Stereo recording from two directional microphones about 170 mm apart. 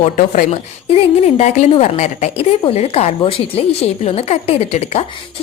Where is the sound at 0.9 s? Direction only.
35° left (ahead or behind).